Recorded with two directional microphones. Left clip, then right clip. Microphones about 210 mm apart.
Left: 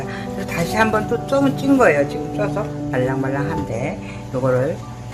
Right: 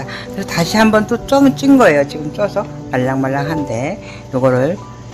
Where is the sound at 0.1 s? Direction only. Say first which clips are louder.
Right 3 dB; 50° right (ahead or behind).